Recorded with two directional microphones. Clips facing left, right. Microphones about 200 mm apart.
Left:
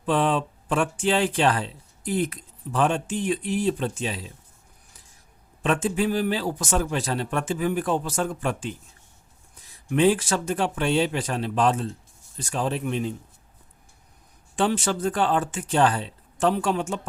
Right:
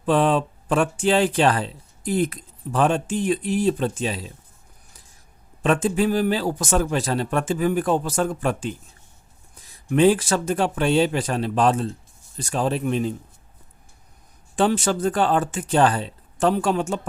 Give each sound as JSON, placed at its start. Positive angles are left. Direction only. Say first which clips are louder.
{"t": 0.0, "sound": "speech", "louder": "right 4 dB", "side_deg": -40}
{"t": 5.6, "sound": "speech", "louder": "right 3 dB", "side_deg": -40}
{"t": 9.9, "sound": "speech", "louder": "right 3 dB", "side_deg": -40}
{"t": 14.5, "sound": "speech", "louder": "right 3 dB", "side_deg": -40}